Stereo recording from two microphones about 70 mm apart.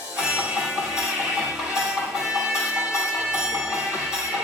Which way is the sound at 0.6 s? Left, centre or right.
Centre.